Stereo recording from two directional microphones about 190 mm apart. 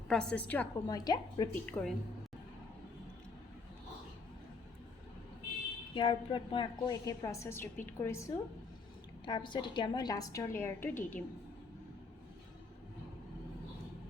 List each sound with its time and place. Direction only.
0.1 s a woman's voice: 5° left (ahead or behind)
0.9 s a woman's voice: 20° left (ahead or behind)
1.5 s a woman's voice: 5° left (ahead or behind)
5.9 s a woman's voice: 25° left (ahead or behind)
9.2 s a woman's voice: 25° left (ahead or behind)